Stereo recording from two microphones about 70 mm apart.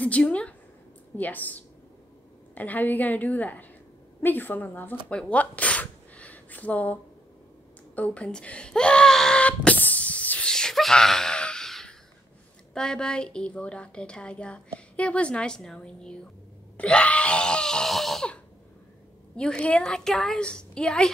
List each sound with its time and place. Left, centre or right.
0.0 s a woman's voice: centre
5.3 s a sound: centre
7.9 s speech: left
10.5 s gasp: centre
12.7 s a woman's voice: centre
16.7 s groan: centre
19.3 s a woman's voice: centre